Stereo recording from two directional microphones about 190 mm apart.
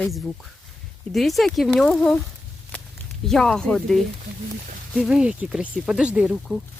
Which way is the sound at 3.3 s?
5° left (ahead or behind).